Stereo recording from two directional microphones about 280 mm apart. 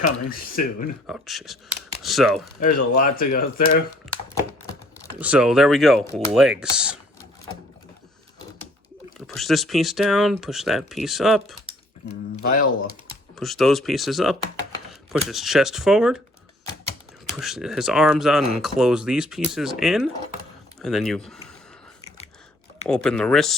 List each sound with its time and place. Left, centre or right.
0.3 s speech: left
1.0 s speech: centre
2.6 s speech: left
5.2 s speech: centre
9.1 s speech: centre
12.4 s speech: left
13.3 s speech: centre
17.3 s speech: centre
22.9 s speech: centre